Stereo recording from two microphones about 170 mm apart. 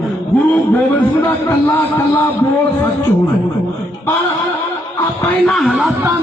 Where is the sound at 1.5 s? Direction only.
10° left (ahead or behind).